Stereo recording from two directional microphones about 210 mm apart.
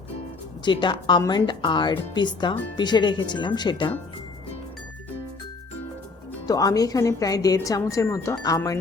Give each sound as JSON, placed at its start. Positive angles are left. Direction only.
{"t": 0.6, "sound": "speech", "side_deg": 20}
{"t": 6.5, "sound": "a woman's voice", "side_deg": 15}